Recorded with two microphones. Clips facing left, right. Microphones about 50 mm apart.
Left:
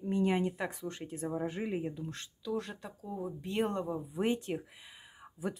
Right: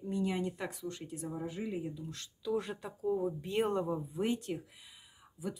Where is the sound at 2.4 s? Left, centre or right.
Centre.